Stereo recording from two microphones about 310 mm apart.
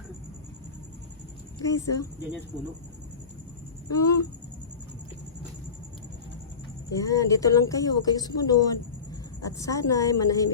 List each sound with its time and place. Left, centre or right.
1.6 s speech: centre
3.8 s speech: centre
6.9 s speech: centre